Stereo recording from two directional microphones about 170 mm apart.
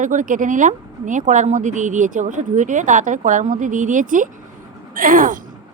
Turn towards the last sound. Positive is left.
turn(degrees=-55)  # may be behind; listen again after turning